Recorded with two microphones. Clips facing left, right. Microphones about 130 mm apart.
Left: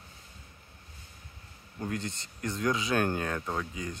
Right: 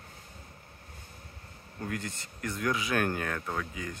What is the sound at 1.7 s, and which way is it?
Speech, 25° left (ahead or behind).